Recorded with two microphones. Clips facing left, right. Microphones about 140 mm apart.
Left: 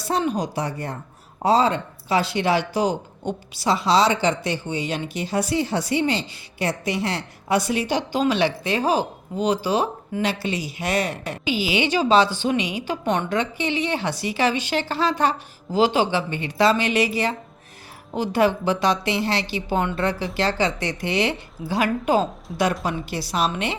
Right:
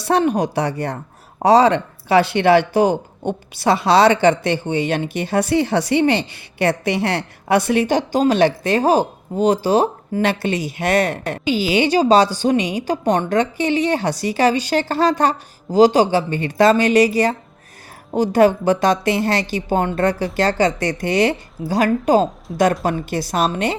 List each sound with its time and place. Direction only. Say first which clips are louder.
0.0 s a woman's voice: right 6 dB; 65° right (ahead or behind); by 11.6 s 50° right (ahead or behind)
11.7 s a woman's voice: right 5 dB; 40° right (ahead or behind)